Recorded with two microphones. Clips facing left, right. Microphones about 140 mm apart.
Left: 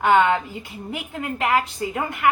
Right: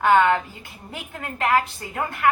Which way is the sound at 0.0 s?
20° left (ahead or behind).